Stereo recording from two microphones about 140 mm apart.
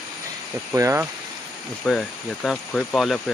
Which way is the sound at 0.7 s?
20° right (ahead or behind).